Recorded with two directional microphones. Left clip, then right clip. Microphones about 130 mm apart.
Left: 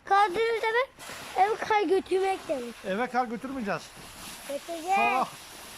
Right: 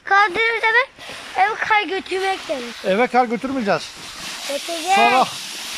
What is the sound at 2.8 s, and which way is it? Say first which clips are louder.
Speech: right 13 dB; 30° right (ahead or behind).